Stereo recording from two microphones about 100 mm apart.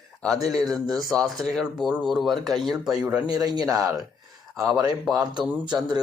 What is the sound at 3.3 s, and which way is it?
Speech, 40° right (ahead or behind).